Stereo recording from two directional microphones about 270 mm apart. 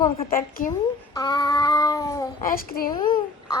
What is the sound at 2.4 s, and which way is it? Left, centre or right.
Speech, left.